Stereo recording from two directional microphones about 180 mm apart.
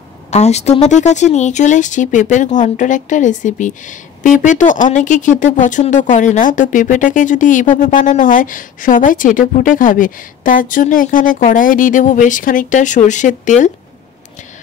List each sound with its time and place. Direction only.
0.3 s speech: 40° left (ahead or behind)